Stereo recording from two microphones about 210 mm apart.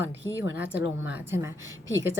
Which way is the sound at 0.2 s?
15° left (ahead or behind).